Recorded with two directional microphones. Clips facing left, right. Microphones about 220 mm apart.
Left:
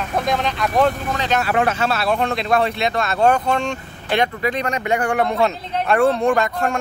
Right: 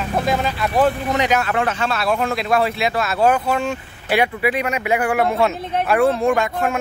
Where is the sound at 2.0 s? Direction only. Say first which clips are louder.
Right 1 dB; centre (ahead or behind).